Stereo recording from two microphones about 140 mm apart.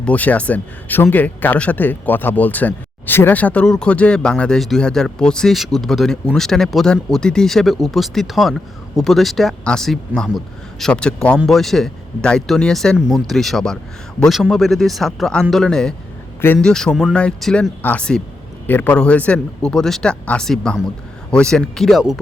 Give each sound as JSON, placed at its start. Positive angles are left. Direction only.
{"t": 0.0, "sound": "speech", "side_deg": 10}